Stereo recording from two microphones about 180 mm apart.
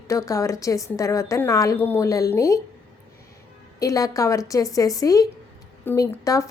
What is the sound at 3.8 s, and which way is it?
A woman's voice, 20° left (ahead or behind).